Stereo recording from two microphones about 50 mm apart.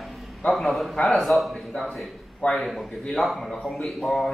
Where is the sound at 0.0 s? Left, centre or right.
Centre.